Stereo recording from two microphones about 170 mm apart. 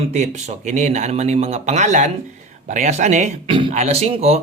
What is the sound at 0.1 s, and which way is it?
Speech, 45° right (ahead or behind).